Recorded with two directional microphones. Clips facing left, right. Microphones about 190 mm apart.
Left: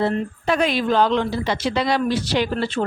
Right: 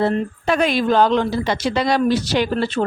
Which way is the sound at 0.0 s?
55° right (ahead or behind).